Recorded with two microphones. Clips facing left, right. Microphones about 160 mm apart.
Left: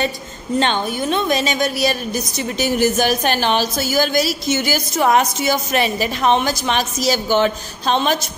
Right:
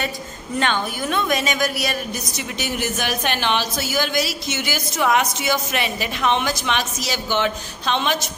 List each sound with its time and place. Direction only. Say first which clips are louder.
0.6 s a woman's voice: left 3 dB; 30° left (ahead or behind)